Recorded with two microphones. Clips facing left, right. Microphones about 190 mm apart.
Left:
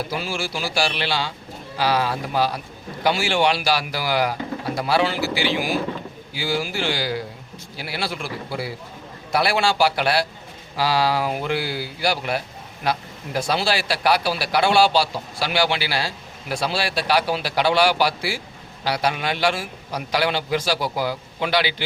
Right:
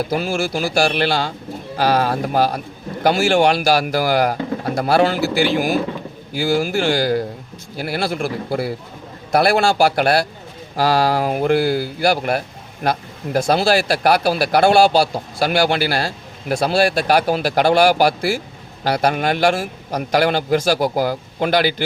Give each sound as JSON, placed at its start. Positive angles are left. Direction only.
{"t": 0.1, "sound": "speech", "side_deg": -50}